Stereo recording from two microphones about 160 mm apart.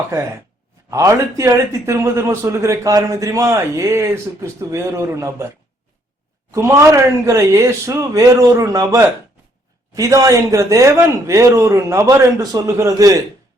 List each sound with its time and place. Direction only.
0.1 s a man's voice: 20° right (ahead or behind)